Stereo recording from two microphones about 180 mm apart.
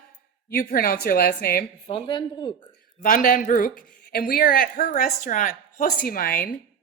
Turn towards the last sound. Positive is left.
turn(degrees=50)  # may be behind; listen again after turning